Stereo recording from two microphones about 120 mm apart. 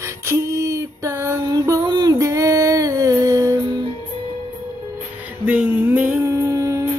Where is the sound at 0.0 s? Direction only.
20° right (ahead or behind).